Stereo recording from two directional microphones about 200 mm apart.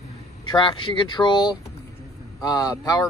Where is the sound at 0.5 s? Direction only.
25° left (ahead or behind).